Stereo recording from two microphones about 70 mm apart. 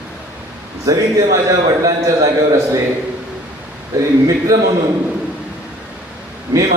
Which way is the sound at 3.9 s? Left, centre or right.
Right.